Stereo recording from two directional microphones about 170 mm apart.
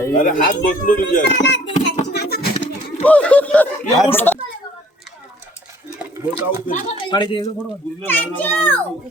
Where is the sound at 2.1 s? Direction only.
70° left (ahead or behind).